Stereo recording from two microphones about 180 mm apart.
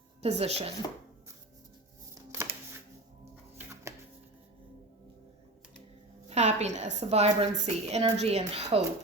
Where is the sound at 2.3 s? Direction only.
15° right (ahead or behind).